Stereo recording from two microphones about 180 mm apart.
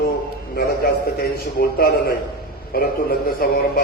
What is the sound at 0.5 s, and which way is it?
A man's voice, 55° left (ahead or behind).